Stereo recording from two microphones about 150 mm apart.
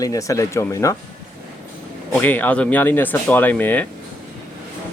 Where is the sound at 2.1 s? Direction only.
10° left (ahead or behind).